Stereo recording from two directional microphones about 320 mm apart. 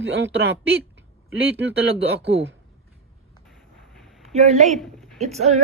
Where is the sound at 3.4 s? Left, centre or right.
Centre.